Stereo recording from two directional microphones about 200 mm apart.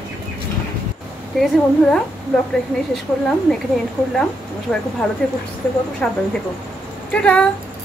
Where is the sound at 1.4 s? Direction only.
Centre (ahead or behind).